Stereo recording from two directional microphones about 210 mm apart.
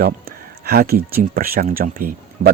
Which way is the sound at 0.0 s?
45° right (ahead or behind).